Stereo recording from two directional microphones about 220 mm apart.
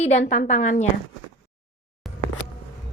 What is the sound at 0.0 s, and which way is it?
Speech, 30° left (ahead or behind).